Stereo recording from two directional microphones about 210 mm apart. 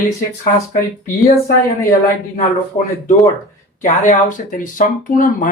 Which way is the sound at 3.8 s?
40° left (ahead or behind).